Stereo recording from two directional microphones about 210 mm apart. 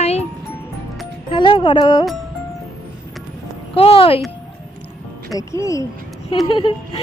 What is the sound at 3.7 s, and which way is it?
Speech, 25° left (ahead or behind).